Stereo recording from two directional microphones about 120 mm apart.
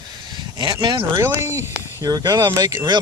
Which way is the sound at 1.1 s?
20° right (ahead or behind).